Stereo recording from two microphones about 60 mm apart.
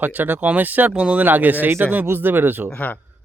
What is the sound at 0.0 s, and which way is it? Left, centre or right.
Speech, right.